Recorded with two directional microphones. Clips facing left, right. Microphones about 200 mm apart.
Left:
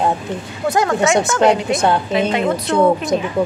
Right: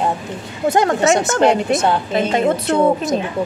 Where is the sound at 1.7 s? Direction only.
Centre (ahead or behind).